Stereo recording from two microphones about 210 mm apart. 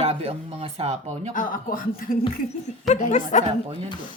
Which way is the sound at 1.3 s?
40° left (ahead or behind).